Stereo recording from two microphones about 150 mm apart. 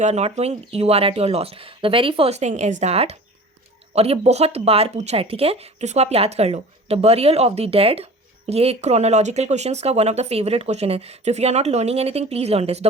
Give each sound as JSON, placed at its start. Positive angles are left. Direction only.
{"t": 0.0, "sound": "speech", "side_deg": -50}